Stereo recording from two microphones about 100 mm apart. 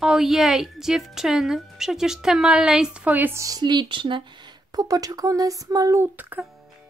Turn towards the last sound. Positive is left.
turn(degrees=-15)  # may be behind; listen again after turning